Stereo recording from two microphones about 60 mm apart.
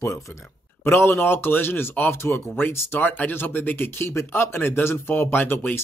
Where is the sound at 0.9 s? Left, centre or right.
Left.